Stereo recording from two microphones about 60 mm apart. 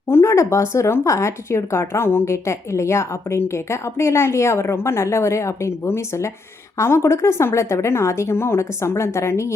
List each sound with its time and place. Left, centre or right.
0.3 s a woman's voice: left